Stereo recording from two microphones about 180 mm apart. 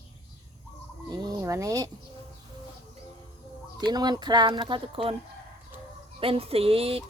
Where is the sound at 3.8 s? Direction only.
20° right (ahead or behind).